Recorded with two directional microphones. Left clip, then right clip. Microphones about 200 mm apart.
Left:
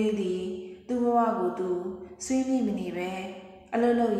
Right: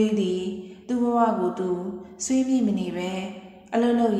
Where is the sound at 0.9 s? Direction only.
40° right (ahead or behind).